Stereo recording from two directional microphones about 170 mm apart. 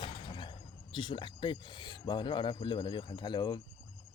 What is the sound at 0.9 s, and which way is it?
Speech, 30° left (ahead or behind).